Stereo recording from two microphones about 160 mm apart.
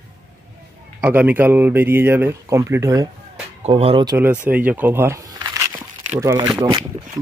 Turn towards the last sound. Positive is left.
turn(degrees=-25)  # may be behind; listen again after turning